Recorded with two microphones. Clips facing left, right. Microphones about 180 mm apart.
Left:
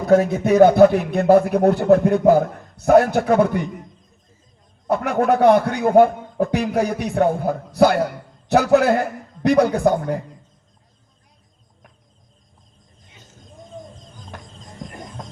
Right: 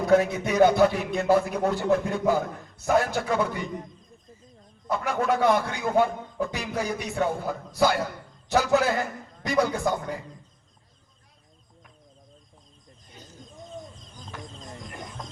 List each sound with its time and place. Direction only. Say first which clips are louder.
0.1 s a man's voice: left 7 dB; 45° left (ahead or behind)
4.9 s a man's voice: left 7 dB; 55° left (ahead or behind)